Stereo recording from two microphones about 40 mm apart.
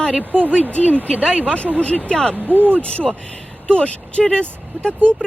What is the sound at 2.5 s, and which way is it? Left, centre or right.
Speech, right.